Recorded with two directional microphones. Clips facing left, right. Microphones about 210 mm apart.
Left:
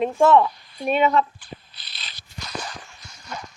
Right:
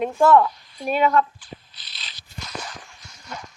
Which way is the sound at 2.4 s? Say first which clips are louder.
Left 2 dB; 30° left (ahead or behind).